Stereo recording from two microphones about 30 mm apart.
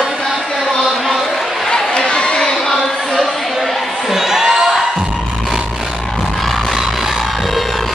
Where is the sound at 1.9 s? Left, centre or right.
Left.